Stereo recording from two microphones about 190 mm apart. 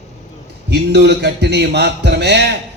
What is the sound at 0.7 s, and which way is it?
A man's voice, 60° right (ahead or behind).